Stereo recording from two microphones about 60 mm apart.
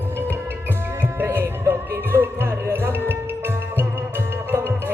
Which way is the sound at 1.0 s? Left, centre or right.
Right.